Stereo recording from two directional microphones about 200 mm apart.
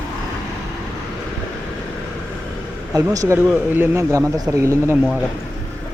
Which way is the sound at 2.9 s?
15° right (ahead or behind).